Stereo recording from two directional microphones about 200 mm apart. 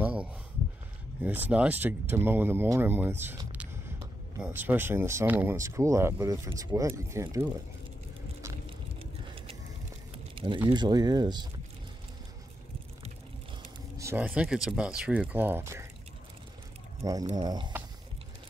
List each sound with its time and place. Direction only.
0.0 s a sound: 5° right (ahead or behind)
1.2 s speech: 10° right (ahead or behind)
10.1 s a sound: 25° right (ahead or behind)
10.7 s speech: 20° right (ahead or behind)
13.9 s speech: 10° right (ahead or behind)
17.0 s speech: 20° right (ahead or behind)